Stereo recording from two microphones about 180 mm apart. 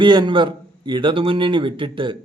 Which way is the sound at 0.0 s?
25° right (ahead or behind).